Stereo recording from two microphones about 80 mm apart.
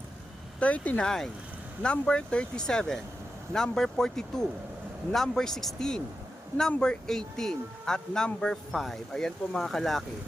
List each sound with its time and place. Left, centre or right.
0.6 s speech: centre